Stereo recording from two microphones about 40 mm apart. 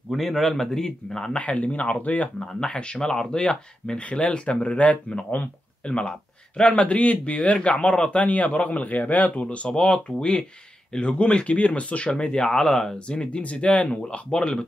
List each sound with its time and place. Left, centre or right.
0.1 s a man's voice: centre
1.4 s speech: left
2.7 s speech: left
5.9 s speech: left
12.4 s a man's voice: centre
13.1 s speech: left